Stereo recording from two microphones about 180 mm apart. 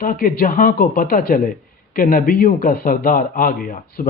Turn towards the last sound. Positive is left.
turn(degrees=50)  # may be behind; listen again after turning